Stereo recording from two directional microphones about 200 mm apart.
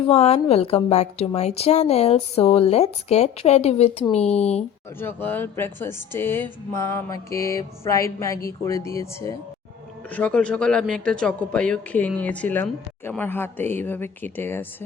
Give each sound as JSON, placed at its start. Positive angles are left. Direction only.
{"t": 0.1, "sound": "a woman's voice", "side_deg": 30}
{"t": 4.9, "sound": "a man's voice", "side_deg": 10}